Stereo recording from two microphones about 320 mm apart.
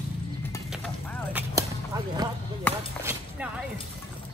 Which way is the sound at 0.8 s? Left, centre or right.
Centre.